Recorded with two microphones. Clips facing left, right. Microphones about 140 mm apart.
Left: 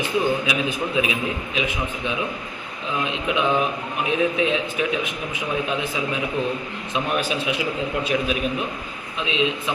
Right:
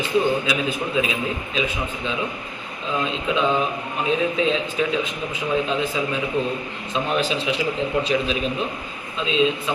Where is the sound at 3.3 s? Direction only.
15° left (ahead or behind).